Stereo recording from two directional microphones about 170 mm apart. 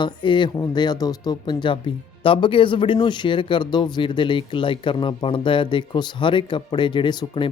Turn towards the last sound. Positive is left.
turn(degrees=25)  # may be behind; listen again after turning